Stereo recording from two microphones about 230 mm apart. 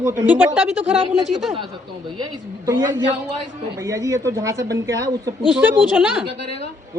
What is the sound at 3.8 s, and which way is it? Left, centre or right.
A man's voice, centre.